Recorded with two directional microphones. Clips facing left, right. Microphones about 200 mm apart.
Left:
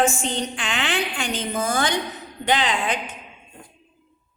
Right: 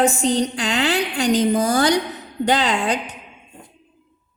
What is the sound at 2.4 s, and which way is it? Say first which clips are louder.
Speech: right 3 dB; 40° right (ahead or behind).